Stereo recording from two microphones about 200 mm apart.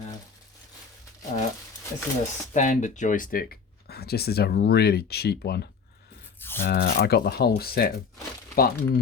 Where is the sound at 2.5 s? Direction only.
35° left (ahead or behind); by 5.6 s 55° left (ahead or behind).